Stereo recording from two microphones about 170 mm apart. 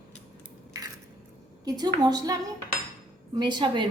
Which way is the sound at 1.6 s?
25° right (ahead or behind).